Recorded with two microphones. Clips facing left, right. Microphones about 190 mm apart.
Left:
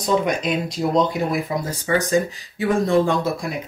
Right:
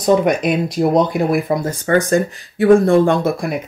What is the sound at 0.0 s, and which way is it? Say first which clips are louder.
Speech: right 6 dB; 55° right (ahead or behind).